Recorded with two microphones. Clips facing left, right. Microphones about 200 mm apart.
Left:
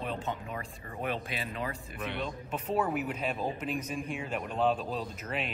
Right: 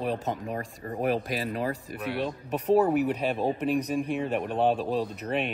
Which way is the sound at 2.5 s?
35° right (ahead or behind).